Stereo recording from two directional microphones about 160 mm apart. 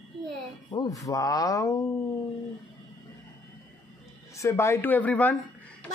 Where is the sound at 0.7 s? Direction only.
25° left (ahead or behind).